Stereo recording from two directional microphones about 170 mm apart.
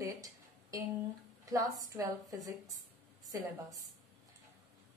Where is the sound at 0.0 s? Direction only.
20° right (ahead or behind).